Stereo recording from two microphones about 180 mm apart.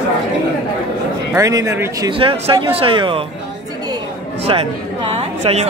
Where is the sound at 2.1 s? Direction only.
30° right (ahead or behind).